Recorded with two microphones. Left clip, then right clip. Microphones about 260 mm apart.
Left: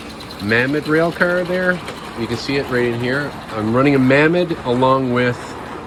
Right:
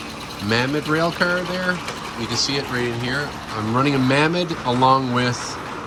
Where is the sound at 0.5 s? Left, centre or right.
Centre.